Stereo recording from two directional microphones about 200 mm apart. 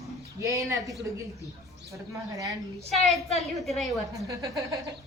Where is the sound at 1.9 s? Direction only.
15° right (ahead or behind).